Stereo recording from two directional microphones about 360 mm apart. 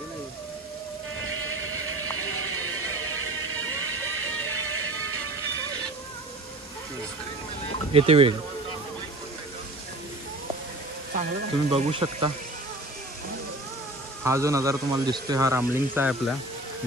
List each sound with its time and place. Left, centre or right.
3.4 s music: right
7.9 s speech: centre
11.7 s speech: centre
14.2 s speech: centre